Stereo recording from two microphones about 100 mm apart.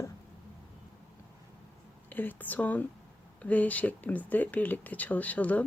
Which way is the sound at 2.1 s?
20° left (ahead or behind).